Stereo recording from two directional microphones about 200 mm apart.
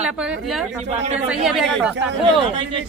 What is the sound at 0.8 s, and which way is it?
Speech, 30° right (ahead or behind).